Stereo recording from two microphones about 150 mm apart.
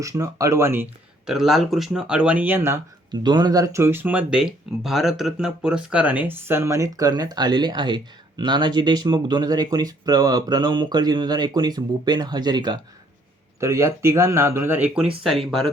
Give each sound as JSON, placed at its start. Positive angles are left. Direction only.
{"t": 0.0, "sound": "speech", "side_deg": -20}
{"t": 1.3, "sound": "speech", "side_deg": -5}
{"t": 3.1, "sound": "speech", "side_deg": -30}